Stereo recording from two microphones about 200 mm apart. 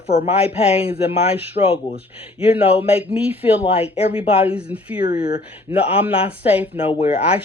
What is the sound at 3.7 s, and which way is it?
Speech, 30° left (ahead or behind).